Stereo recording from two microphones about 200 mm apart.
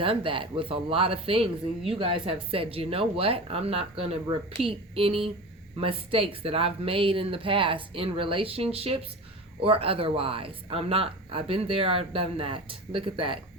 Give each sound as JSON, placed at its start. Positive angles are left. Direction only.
{"t": 0.0, "sound": "speech", "side_deg": -25}